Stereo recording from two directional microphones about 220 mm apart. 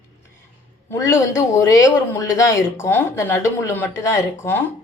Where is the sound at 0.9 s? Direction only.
10° left (ahead or behind).